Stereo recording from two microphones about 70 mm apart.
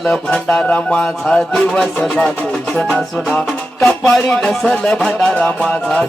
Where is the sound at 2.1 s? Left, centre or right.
Left.